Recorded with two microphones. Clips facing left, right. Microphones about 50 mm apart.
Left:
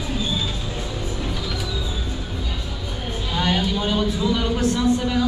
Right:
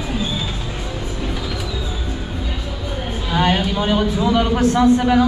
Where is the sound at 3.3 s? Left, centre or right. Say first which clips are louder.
Right 4 dB; right.